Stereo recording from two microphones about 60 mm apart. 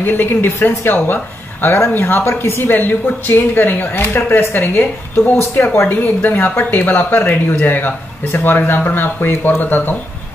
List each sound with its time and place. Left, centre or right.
0.0 s speech: left
5.9 s speech: left